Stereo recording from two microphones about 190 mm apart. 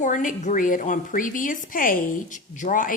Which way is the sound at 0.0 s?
45° left (ahead or behind).